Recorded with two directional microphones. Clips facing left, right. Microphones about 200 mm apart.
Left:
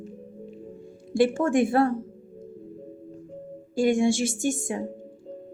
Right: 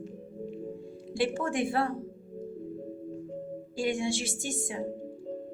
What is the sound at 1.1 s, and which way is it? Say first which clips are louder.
Speech: left 8 dB; 45° left (ahead or behind).